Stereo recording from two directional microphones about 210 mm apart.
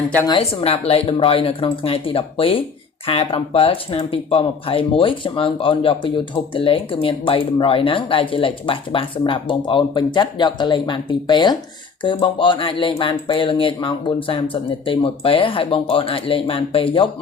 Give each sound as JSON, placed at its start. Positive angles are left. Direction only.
{"t": 0.3, "sound": "speech", "side_deg": 25}